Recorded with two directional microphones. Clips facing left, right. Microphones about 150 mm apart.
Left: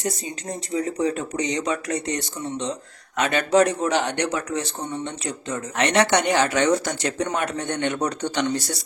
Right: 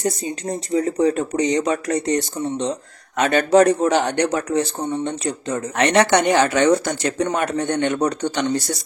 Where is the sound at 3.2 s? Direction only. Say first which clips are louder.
Right 4 dB; 45° right (ahead or behind).